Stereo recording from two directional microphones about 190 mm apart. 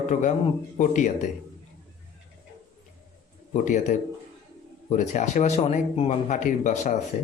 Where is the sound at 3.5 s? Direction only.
40° left (ahead or behind).